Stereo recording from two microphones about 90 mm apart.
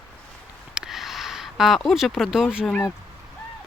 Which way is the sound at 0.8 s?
5° right (ahead or behind).